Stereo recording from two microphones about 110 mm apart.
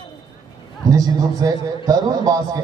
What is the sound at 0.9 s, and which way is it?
A man's voice, 35° right (ahead or behind).